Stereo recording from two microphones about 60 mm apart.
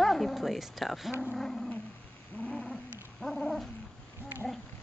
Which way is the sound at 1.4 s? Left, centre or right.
Centre.